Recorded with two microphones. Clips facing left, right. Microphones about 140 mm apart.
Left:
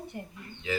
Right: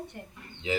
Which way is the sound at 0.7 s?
20° right (ahead or behind).